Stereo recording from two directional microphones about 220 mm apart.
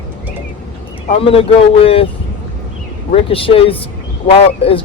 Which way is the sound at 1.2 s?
25° left (ahead or behind).